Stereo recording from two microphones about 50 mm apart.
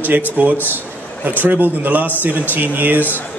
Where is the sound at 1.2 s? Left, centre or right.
Right.